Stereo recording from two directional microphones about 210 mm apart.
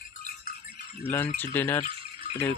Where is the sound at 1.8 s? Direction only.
25° right (ahead or behind).